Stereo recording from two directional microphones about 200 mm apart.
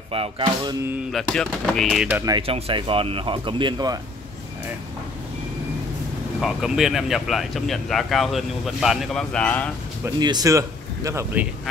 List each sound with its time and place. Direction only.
0.1 s speech: 25° right (ahead or behind)
1.1 s speech: 5° left (ahead or behind)
2.3 s speech: 30° right (ahead or behind)
6.4 s speech: centre (ahead or behind)
10.0 s speech: 20° right (ahead or behind)